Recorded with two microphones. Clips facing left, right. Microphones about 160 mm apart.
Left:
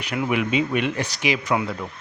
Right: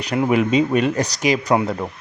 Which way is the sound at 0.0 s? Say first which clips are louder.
Right 6 dB; 40° right (ahead or behind).